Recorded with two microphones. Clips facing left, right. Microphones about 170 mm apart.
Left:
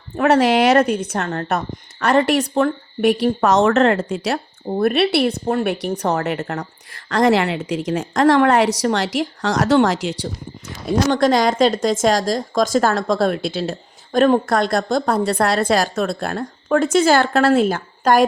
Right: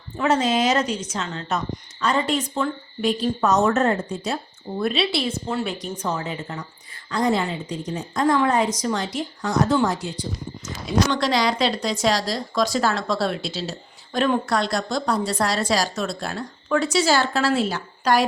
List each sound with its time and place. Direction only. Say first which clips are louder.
0.2 s a woman's voice: left 6 dB; 65° left (ahead or behind); by 4.4 s 90° left
4.8 s a woman's voice: left 7 dB; 60° left (ahead or behind); by 10.2 s 85° left
10.8 s speech: left 5 dB; 50° left (ahead or behind)